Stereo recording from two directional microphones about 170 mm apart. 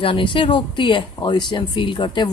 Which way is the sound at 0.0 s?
30° left (ahead or behind).